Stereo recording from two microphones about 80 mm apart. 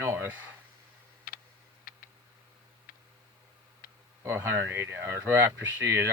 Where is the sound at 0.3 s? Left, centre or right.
Right.